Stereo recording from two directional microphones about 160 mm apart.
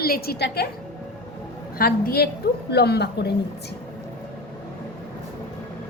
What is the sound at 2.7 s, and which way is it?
Speech, 90° left.